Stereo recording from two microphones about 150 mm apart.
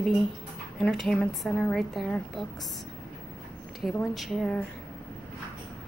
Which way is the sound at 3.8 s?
Centre (ahead or behind).